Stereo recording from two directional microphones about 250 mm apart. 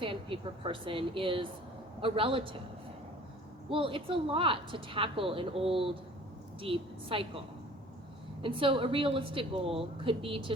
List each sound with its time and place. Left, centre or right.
0.0 s a woman's voice: right
3.7 s a woman's voice: right